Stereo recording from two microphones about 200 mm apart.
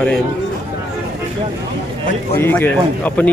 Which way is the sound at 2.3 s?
10° left (ahead or behind).